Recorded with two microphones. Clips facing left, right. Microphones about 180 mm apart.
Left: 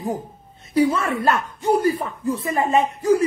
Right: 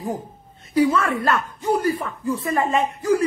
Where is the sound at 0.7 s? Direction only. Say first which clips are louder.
Even; 25° left (ahead or behind).